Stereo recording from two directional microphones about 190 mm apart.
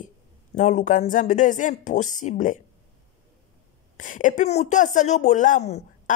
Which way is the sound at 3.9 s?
45° left (ahead or behind).